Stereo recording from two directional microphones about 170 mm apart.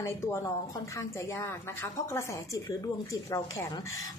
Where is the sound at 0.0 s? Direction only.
15° left (ahead or behind).